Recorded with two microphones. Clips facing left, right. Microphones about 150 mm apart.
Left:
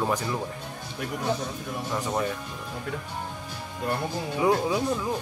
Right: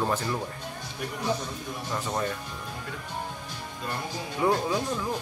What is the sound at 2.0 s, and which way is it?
Speech, 10° left (ahead or behind).